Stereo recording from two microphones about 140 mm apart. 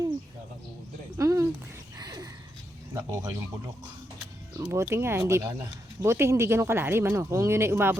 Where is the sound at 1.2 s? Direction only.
20° right (ahead or behind).